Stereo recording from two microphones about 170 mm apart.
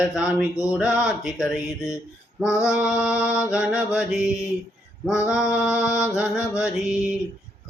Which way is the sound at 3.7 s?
5° right (ahead or behind).